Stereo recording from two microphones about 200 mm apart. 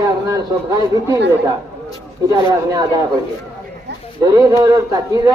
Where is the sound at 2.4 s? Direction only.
20° right (ahead or behind).